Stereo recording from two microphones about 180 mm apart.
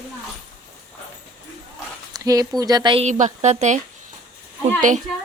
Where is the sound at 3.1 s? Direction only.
40° right (ahead or behind).